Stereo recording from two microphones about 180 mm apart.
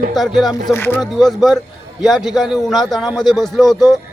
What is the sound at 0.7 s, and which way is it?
Speech, 10° left (ahead or behind).